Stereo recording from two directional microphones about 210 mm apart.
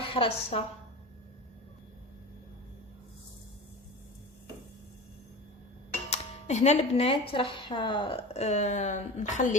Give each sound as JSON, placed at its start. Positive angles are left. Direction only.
{"t": 0.0, "sound": "a woman's voice", "side_deg": 25}
{"t": 6.1, "sound": "speech", "side_deg": 30}